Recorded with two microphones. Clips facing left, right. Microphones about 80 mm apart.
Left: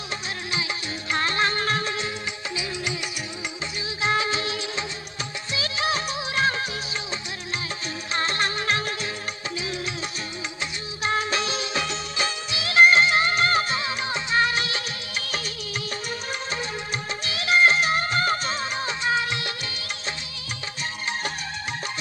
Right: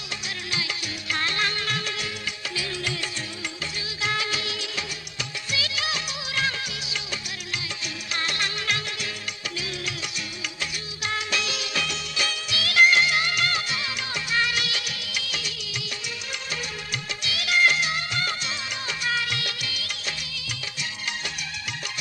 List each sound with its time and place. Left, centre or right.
1.1 s music: left
2.6 s music: centre
4.0 s music: left
8.1 s music: left
17.2 s music: left